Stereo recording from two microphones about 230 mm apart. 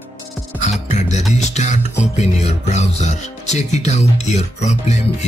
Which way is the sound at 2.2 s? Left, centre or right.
Left.